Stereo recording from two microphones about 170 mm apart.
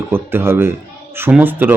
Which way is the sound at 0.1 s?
15° right (ahead or behind).